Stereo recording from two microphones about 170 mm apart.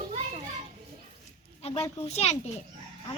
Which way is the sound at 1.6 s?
35° left (ahead or behind).